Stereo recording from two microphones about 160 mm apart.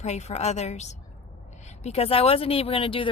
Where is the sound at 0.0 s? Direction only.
45° left (ahead or behind).